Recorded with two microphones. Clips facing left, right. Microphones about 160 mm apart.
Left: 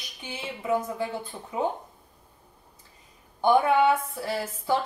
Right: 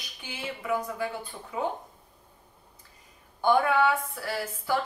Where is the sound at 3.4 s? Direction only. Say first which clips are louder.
Left 2 dB; 20° left (ahead or behind).